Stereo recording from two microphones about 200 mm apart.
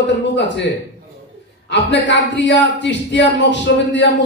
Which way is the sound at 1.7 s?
60° left (ahead or behind).